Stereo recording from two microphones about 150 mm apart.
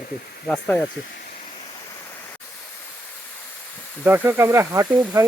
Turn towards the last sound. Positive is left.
turn(degrees=-20)  # may be behind; listen again after turning